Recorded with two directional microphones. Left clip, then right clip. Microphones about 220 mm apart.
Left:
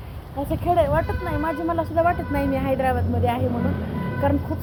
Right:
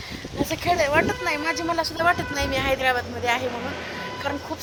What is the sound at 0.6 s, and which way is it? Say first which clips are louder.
Speech: even; 30° right (ahead or behind).